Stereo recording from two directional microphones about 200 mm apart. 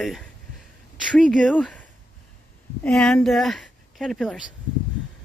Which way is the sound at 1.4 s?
5° left (ahead or behind).